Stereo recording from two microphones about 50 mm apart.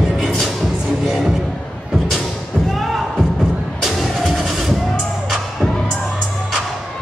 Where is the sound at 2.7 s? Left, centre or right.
Centre.